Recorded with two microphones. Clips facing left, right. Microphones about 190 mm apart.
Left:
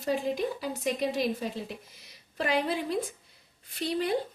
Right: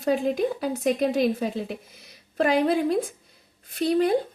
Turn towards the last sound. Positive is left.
turn(degrees=-50)  # may be behind; listen again after turning